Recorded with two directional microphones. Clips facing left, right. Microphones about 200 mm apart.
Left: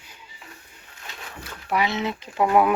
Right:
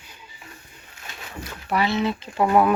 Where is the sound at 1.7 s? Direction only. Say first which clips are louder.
Right 2 dB; 15° left (ahead or behind).